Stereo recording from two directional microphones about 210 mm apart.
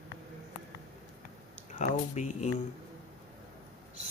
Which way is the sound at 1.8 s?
35° left (ahead or behind).